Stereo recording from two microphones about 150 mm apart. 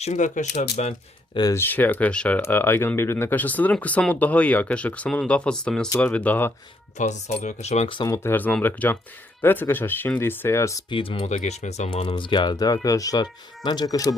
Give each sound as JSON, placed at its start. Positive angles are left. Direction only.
{"t": 0.0, "sound": "speech", "side_deg": 55}
{"t": 1.3, "sound": "speech", "side_deg": 25}
{"t": 1.5, "sound": "speech", "side_deg": 15}
{"t": 7.1, "sound": "speech", "side_deg": 50}
{"t": 7.9, "sound": "speech", "side_deg": 25}
{"t": 10.8, "sound": "speech", "side_deg": 35}
{"t": 11.9, "sound": "speech", "side_deg": 35}